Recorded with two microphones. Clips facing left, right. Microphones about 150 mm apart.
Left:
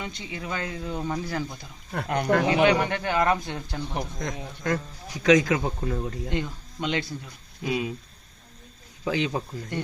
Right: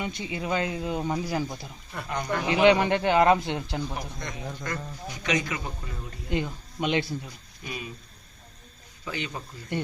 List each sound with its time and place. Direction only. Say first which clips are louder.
0.0 s speech: right 3 dB; 20° right (ahead or behind)
1.9 s speech: left 6 dB; 65° left (ahead or behind)
2.6 s speech: right 3 dB; 20° right (ahead or behind)
4.2 s speech: left 3 dB; 90° left; by 6.1 s 70° left (ahead or behind)
6.3 s speech: right 1 dB; 15° right (ahead or behind)
7.6 s speech: left 10 dB; 90° left
9.0 s speech: left 8 dB; 90° left